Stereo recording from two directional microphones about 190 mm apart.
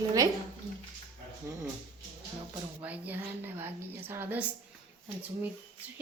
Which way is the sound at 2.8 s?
10° right (ahead or behind).